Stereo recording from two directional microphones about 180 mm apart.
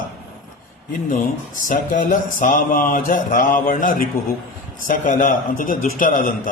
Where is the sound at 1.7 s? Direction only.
50° left (ahead or behind).